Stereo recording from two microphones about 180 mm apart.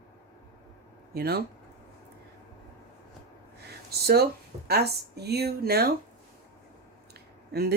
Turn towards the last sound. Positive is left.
turn(degrees=-65)  # may be behind; listen again after turning